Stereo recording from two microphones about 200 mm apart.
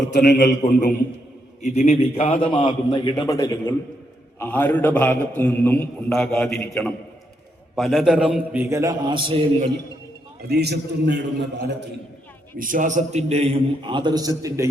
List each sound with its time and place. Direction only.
0.1 s a man's voice: 60° left (ahead or behind)
0.4 s a man's voice: 40° left (ahead or behind); by 9.6 s 30° right (ahead or behind)
10.5 s a man's voice: 55° right (ahead or behind)
12.5 s a man's voice: 40° right (ahead or behind); by 14.7 s 15° right (ahead or behind)